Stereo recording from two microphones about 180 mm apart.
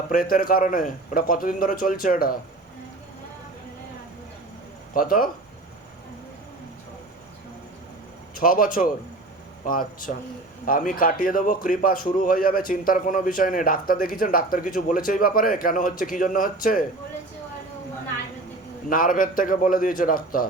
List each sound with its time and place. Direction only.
0.1 s a man's voice: 50° left (ahead or behind)
4.9 s a man's voice: 50° left (ahead or behind)
8.4 s a man's voice: 50° left (ahead or behind)
18.9 s a man's voice: 50° left (ahead or behind)